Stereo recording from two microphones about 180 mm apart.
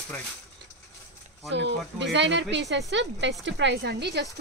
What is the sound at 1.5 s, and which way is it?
Speech, 80° right.